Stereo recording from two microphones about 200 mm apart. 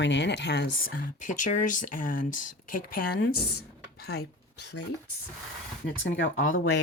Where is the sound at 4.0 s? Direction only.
50° left (ahead or behind).